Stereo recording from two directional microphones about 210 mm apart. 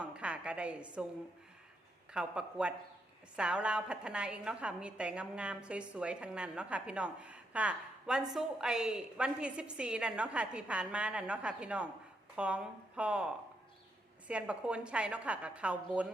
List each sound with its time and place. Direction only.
0.0 s a woman's voice: 5° right (ahead or behind)
2.1 s a woman's voice: 5° right (ahead or behind)